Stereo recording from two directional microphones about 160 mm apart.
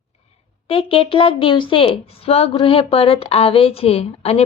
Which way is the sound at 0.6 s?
35° left (ahead or behind).